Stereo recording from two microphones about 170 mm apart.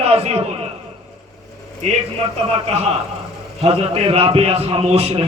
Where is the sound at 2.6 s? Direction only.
40° right (ahead or behind).